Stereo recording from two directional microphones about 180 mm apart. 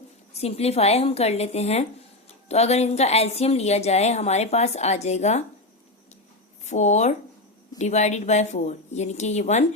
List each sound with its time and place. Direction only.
0.3 s a woman's voice: 35° left (ahead or behind)
6.7 s a woman's voice: 40° left (ahead or behind)